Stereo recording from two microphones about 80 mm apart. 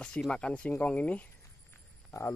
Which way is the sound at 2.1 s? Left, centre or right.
Left.